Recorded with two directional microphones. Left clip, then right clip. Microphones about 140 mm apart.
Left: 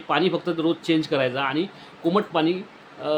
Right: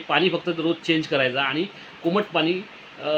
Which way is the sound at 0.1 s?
10° left (ahead or behind).